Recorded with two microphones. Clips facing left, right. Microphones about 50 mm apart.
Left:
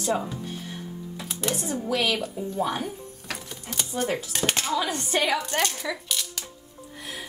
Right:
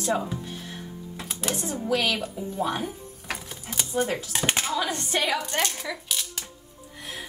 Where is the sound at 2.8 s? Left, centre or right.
Centre.